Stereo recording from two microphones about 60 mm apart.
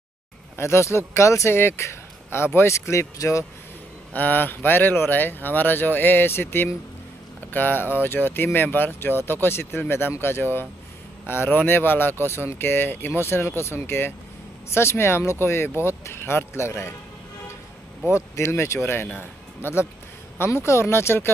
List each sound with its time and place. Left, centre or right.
0.6 s speech: left
4.1 s speech: left
18.1 s speech: left